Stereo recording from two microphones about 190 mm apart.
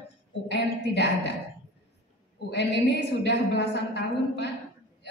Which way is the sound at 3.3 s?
65° left (ahead or behind).